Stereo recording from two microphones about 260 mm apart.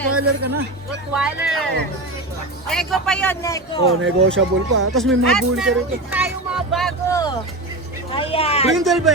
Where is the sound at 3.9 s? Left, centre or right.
Right.